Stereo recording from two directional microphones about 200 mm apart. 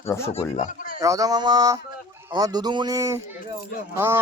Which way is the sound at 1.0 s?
15° right (ahead or behind).